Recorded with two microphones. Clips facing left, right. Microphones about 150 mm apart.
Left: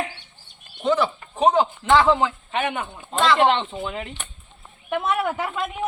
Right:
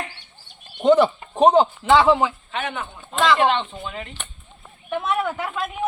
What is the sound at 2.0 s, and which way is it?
Speech, 10° right (ahead or behind).